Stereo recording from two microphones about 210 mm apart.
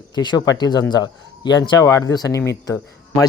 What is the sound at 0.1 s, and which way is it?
Speech, 20° left (ahead or behind).